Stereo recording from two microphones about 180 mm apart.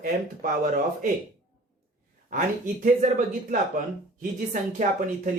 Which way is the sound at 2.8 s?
45° right (ahead or behind).